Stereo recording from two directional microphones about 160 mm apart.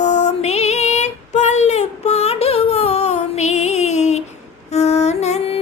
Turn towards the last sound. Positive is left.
turn(degrees=40)  # may be behind; listen again after turning